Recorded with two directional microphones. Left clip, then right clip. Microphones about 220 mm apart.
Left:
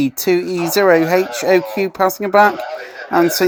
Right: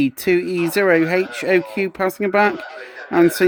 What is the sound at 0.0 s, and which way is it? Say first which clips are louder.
Speech: left 2 dB; 10° right (ahead or behind).